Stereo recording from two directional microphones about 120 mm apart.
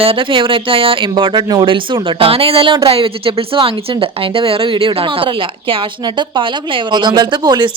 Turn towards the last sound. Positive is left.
turn(degrees=-35)  # may be behind; listen again after turning